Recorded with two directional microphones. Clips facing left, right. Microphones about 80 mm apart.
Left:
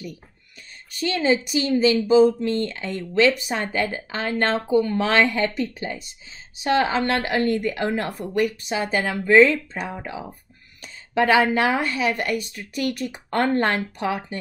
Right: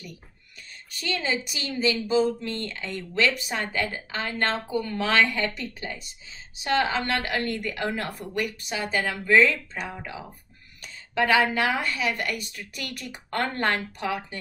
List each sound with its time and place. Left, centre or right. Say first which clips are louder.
1.0 s a woman's voice: left 7 dB; left